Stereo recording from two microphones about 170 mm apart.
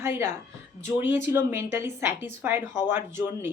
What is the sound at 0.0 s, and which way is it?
Speech, 10° right (ahead or behind).